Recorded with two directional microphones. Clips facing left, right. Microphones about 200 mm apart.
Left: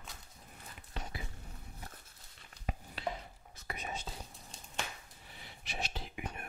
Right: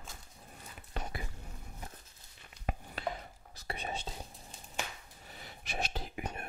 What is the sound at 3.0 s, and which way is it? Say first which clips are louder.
Chopping: right 1 dB; 50° right (ahead or behind).